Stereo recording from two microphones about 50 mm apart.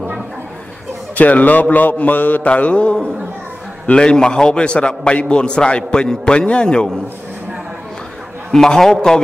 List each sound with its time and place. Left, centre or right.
1.1 s mantra: left
3.8 s a man's voice: left
8.5 s a man's voice: centre